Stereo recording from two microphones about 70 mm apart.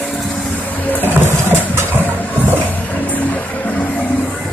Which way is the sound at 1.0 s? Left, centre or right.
Right.